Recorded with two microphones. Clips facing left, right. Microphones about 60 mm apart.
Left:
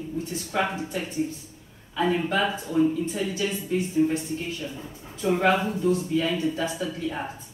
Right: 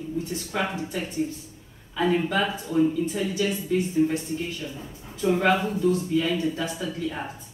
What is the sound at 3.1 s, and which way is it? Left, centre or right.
Speech, centre.